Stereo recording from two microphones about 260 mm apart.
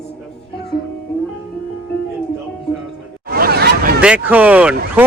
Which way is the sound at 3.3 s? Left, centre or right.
Right.